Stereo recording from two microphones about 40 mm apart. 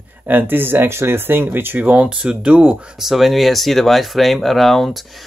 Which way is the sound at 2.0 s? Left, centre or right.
Right.